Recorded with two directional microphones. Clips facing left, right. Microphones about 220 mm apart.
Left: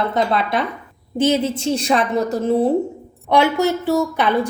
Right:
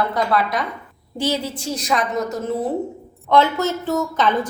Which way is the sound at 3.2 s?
15° left (ahead or behind).